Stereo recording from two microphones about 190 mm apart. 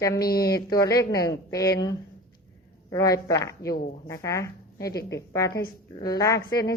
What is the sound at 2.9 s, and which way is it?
A woman's voice, 15° left (ahead or behind).